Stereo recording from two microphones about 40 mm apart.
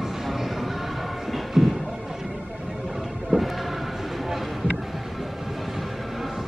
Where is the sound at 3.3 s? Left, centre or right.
Right.